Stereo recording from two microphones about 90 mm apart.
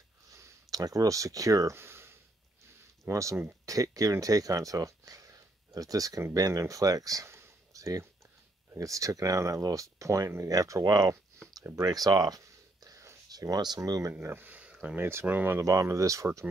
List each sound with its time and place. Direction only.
0.3 s a sound: 40° right (ahead or behind)
3.1 s speech: 35° right (ahead or behind)
11.5 s whispering: 40° right (ahead or behind)
13.7 s speech: 40° right (ahead or behind)
14.2 s a sound: 25° right (ahead or behind)
15.0 s speech: 25° right (ahead or behind)